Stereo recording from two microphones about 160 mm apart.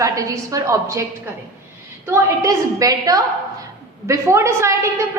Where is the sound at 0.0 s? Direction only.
20° right (ahead or behind).